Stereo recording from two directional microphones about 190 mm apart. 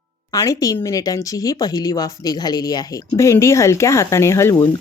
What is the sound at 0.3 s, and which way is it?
Speech, 20° left (ahead or behind).